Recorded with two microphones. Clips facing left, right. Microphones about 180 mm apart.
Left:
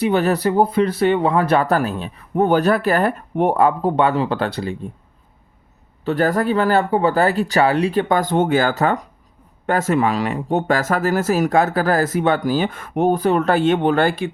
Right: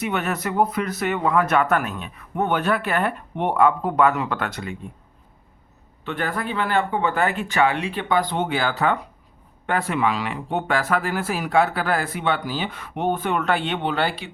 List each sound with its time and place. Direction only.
0.0 s speech: 35° left (ahead or behind)
6.1 s speech: 40° left (ahead or behind)